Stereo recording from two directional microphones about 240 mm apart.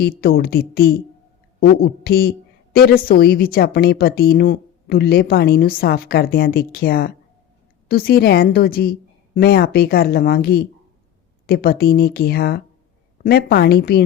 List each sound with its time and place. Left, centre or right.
0.0 s a woman's voice: left